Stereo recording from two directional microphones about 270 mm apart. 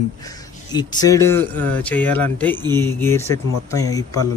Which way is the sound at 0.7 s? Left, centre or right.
Centre.